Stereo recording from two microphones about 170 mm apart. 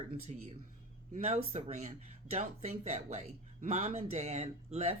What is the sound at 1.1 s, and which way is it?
Speech, 40° right (ahead or behind).